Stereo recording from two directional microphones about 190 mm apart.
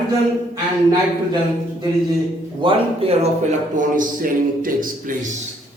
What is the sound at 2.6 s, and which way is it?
A man's voice, 30° right (ahead or behind).